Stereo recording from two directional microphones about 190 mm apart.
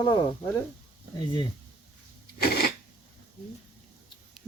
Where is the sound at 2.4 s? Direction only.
55° left (ahead or behind).